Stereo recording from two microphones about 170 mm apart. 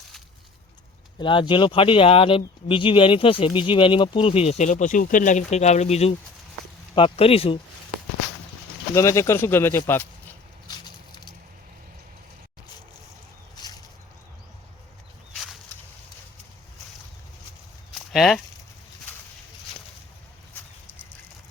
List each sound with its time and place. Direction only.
1.2 s speech: 30° left (ahead or behind)
9.0 s speech: 15° left (ahead or behind)
10.7 s a sound: 25° left (ahead or behind)
18.1 s speech: centre (ahead or behind)